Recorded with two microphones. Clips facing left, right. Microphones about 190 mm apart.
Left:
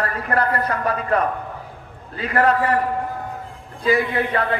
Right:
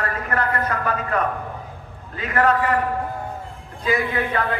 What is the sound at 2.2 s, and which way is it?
Speech, 35° left (ahead or behind).